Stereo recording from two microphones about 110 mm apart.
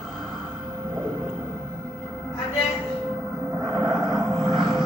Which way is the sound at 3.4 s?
20° left (ahead or behind).